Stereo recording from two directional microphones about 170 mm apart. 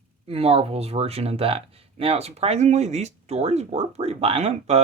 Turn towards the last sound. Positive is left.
turn(degrees=-40)  # may be behind; listen again after turning